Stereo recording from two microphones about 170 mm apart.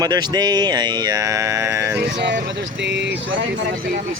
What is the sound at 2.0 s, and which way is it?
Speech, 85° right.